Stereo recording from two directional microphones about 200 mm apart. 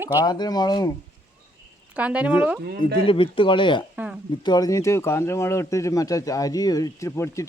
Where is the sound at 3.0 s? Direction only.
25° left (ahead or behind).